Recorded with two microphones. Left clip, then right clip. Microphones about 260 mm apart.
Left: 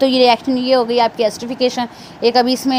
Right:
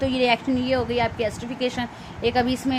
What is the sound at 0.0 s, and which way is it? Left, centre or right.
A woman's voice, left.